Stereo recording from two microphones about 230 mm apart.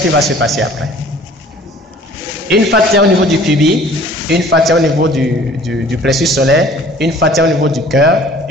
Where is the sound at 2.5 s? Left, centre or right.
Right.